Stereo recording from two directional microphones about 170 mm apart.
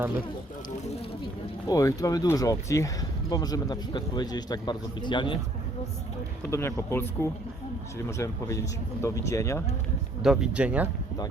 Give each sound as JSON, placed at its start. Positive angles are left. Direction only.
{"t": 1.6, "sound": "speech", "side_deg": 20}
{"t": 6.5, "sound": "speech", "side_deg": 15}
{"t": 10.2, "sound": "speech", "side_deg": -5}